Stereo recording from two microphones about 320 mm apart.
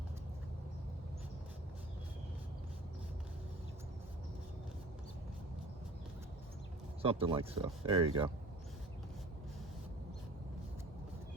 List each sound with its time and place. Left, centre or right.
7.0 s speech: centre